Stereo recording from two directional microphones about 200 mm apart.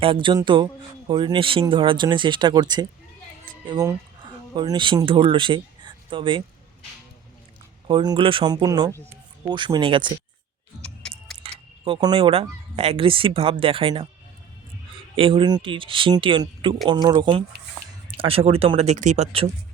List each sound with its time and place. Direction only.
0.0 s speech: 25° right (ahead or behind)
7.9 s speech: 25° right (ahead or behind)
11.0 s music: 5° left (ahead or behind)
11.4 s speech: 25° right (ahead or behind)
15.1 s speech: 25° right (ahead or behind)